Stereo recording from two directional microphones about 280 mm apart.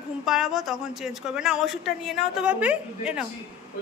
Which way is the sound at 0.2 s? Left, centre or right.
Centre.